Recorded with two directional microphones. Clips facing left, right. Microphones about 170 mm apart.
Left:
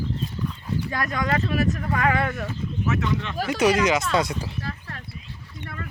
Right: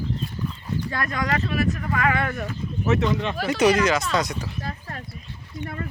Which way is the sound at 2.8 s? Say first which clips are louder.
Right 4 dB; 25° right (ahead or behind).